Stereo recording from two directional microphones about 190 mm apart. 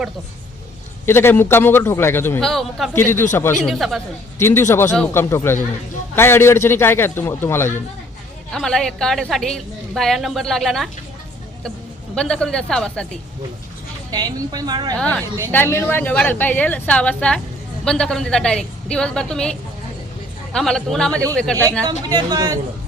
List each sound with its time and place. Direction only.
1.0 s a man's voice: 10° left (ahead or behind)
2.9 s a man's voice: 10° left (ahead or behind)
3.7 s a woman's voice: centre (ahead or behind)
4.4 s a man's voice: 10° left (ahead or behind)
12.1 s a woman's voice: 5° left (ahead or behind)
14.1 s a woman's voice: 20° right (ahead or behind)
14.9 s a man's voice: 5° left (ahead or behind)
22.1 s a woman's voice: 20° right (ahead or behind)